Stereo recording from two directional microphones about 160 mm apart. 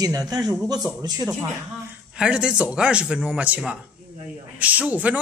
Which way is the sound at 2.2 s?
5° right (ahead or behind).